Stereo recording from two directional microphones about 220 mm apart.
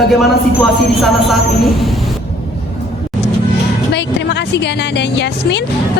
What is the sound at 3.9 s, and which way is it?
Speech, 50° left (ahead or behind).